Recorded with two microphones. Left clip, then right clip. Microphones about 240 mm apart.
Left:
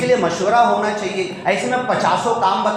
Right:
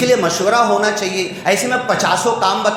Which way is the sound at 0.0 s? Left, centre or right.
Right.